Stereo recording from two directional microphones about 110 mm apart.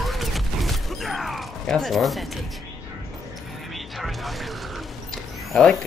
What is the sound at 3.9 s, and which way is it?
Mechanisms, centre (ahead or behind).